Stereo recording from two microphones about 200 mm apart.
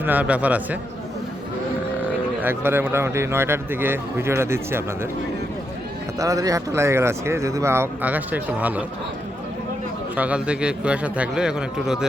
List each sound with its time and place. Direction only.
0.0 s speech: 10° right (ahead or behind)
2.4 s speech: 10° right (ahead or behind)
6.1 s speech: 15° right (ahead or behind)
10.2 s a man's voice: 5° right (ahead or behind)